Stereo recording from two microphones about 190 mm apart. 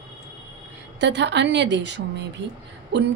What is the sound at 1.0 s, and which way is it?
A woman's voice, 65° right (ahead or behind).